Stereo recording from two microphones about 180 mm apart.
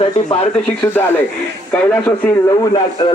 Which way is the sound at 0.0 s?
30° left (ahead or behind).